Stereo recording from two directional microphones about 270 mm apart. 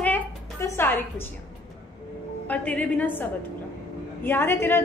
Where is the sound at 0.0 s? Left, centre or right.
Centre.